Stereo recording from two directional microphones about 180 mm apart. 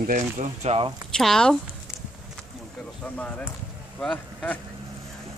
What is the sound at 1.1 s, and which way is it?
Speech, 5° left (ahead or behind).